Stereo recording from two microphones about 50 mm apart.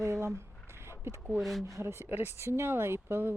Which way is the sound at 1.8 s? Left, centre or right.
Right.